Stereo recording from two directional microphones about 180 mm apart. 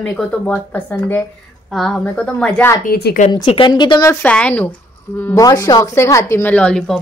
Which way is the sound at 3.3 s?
25° left (ahead or behind).